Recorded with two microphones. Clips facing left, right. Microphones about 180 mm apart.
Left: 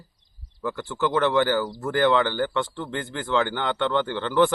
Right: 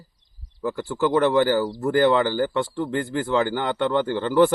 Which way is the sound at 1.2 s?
35° right (ahead or behind).